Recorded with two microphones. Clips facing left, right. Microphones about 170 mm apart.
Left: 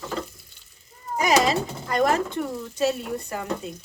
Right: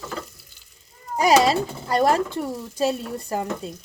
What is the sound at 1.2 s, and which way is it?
Speech, 35° right (ahead or behind).